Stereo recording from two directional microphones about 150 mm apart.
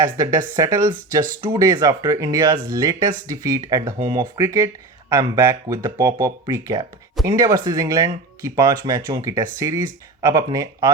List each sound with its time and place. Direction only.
0.2 s speech: 20° right (ahead or behind)